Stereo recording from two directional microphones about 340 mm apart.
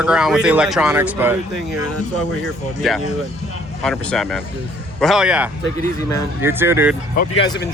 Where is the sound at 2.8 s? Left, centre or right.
Centre.